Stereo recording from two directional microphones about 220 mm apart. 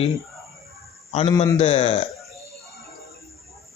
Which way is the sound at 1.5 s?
25° left (ahead or behind).